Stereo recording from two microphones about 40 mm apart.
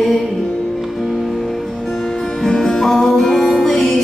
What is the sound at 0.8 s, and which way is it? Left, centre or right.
Music, centre.